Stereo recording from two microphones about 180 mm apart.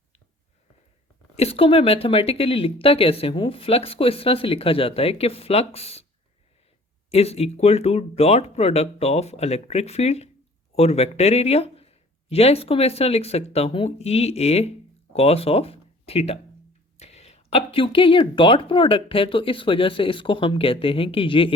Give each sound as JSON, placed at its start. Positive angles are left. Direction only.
{"t": 1.4, "sound": "speech", "side_deg": 35}
{"t": 7.1, "sound": "speech", "side_deg": 35}